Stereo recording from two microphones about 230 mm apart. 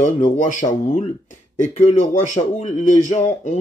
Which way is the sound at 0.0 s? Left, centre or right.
Left.